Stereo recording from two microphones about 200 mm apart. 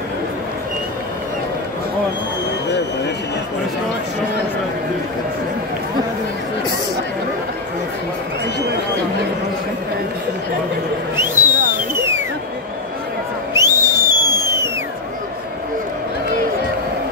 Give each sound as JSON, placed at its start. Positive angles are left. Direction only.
{"t": 11.1, "sound": "owl", "side_deg": -10}
{"t": 11.9, "sound": "a sound", "side_deg": -15}
{"t": 13.5, "sound": "owl", "side_deg": -15}